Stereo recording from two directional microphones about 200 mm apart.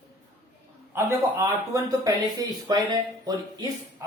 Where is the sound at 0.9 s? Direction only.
15° right (ahead or behind).